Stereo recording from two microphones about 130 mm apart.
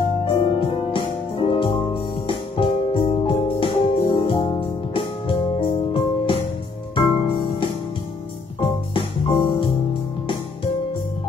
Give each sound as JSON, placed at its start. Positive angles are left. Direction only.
{"t": 0.4, "sound": "music", "side_deg": 40}
{"t": 2.2, "sound": "keyboard", "side_deg": 45}
{"t": 3.3, "sound": "music", "side_deg": 45}